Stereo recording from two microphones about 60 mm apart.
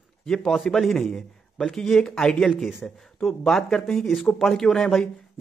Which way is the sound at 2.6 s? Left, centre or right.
Centre.